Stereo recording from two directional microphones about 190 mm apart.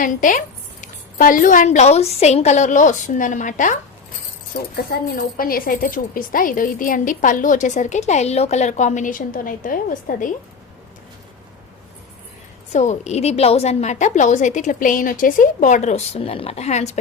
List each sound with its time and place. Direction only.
0.0 s a woman's voice: 45° left (ahead or behind)
4.5 s speech: 55° left (ahead or behind)
12.7 s a woman's voice: 40° left (ahead or behind)